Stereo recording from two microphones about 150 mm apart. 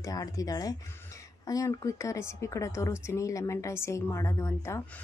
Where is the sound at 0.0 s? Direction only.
25° left (ahead or behind).